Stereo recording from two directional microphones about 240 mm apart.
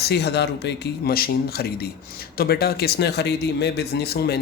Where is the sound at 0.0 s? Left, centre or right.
Left.